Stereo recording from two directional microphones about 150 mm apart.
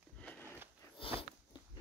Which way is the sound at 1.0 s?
40° left (ahead or behind).